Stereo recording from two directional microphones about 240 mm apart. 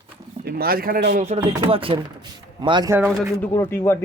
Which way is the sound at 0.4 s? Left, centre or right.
Right.